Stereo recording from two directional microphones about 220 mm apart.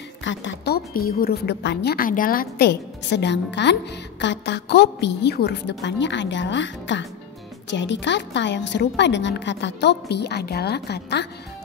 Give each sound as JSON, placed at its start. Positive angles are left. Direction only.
{"t": 0.2, "sound": "a woman's voice", "side_deg": 55}